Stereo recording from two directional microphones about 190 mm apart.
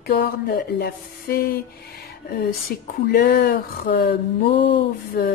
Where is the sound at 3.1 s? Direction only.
55° left (ahead or behind).